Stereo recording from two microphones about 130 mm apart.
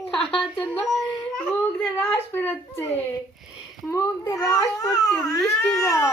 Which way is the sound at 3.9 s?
25° left (ahead or behind).